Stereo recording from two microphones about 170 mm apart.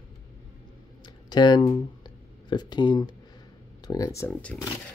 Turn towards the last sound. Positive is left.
turn(degrees=10)  # may be behind; listen again after turning